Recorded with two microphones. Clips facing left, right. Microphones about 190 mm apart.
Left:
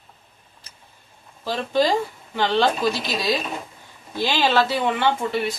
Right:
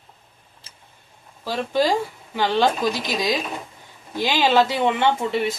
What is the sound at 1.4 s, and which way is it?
A man's voice, 10° right (ahead or behind).